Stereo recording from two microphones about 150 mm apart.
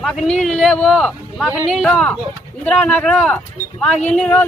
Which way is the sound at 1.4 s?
15° right (ahead or behind).